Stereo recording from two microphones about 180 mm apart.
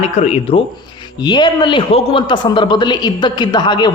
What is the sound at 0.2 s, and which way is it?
A man's voice, 35° left (ahead or behind).